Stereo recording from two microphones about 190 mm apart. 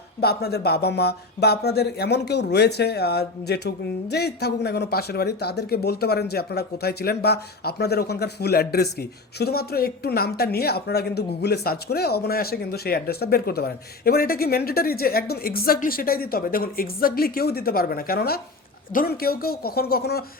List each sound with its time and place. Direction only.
0.2 s speech: 55° left (ahead or behind)